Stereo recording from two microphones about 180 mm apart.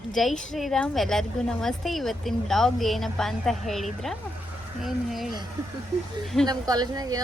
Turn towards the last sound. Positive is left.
turn(degrees=-20)  # may be behind; listen again after turning